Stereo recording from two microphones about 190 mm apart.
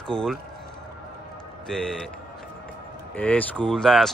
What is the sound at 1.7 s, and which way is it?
Speech, centre (ahead or behind).